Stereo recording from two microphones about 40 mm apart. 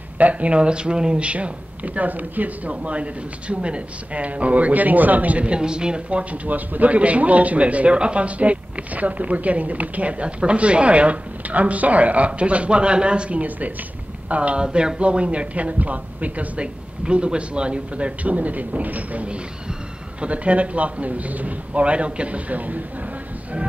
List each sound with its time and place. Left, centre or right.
0.2 s speech: right
0.6 s speech: right
5.4 s speech: right
16.6 s speech: right